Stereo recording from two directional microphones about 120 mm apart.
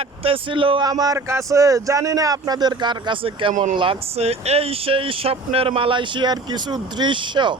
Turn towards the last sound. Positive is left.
turn(degrees=-40)  # may be behind; listen again after turning